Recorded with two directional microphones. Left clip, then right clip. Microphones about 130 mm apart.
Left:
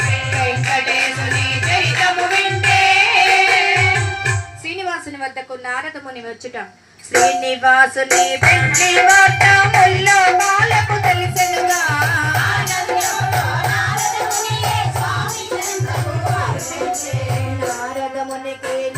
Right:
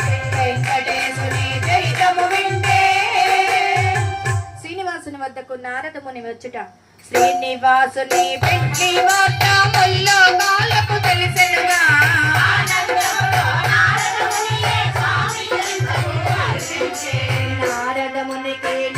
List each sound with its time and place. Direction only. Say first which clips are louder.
0.0 s music: left 2 dB; 30° left (ahead or behind)
7.2 s music: left 1 dB; 75° left (ahead or behind)
7.7 s music: left 3 dB; 45° left (ahead or behind)
11.3 s music: right 2 dB; 60° left (ahead or behind); by 14.0 s 40° left (ahead or behind)
14.2 s music: right 1 dB; 25° left (ahead or behind)